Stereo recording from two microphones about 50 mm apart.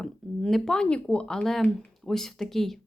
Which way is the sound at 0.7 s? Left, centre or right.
Left.